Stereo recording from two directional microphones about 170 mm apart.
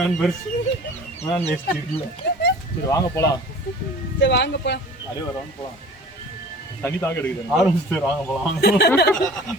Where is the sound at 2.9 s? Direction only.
20° left (ahead or behind).